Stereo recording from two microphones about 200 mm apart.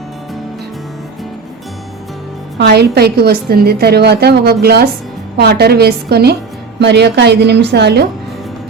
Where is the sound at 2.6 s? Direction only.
55° right (ahead or behind).